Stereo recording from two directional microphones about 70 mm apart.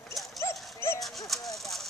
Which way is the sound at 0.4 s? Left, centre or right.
Left.